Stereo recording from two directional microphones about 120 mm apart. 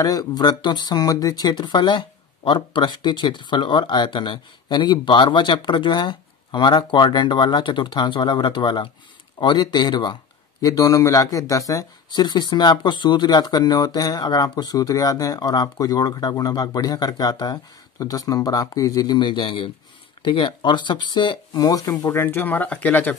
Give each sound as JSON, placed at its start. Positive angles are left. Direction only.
{"t": 0.0, "sound": "speech", "side_deg": 30}